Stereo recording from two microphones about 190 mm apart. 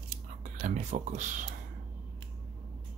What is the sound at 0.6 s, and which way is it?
Speech, 35° right (ahead or behind).